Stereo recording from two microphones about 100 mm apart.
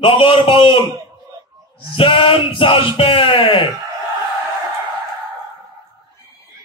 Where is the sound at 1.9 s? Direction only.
60° left (ahead or behind).